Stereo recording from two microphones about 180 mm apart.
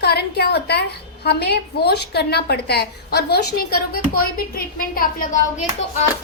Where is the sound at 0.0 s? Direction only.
65° left (ahead or behind).